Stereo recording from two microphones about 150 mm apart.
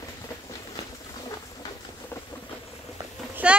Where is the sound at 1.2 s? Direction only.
25° left (ahead or behind).